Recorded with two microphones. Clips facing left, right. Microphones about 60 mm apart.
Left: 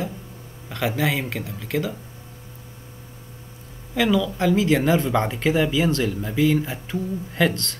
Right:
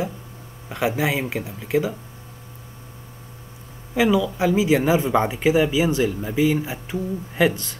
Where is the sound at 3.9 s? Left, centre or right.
Centre.